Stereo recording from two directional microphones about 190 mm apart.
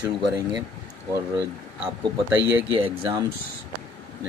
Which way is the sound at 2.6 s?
25° right (ahead or behind).